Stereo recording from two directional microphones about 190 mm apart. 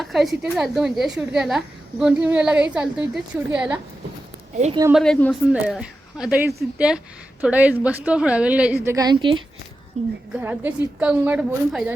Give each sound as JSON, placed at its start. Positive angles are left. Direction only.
{"t": 0.0, "sound": "a woman's voice", "side_deg": 0}
{"t": 4.9, "sound": "a woman's voice", "side_deg": 0}
{"t": 10.0, "sound": "a woman's voice", "side_deg": -35}
{"t": 10.3, "sound": "a woman's voice", "side_deg": -10}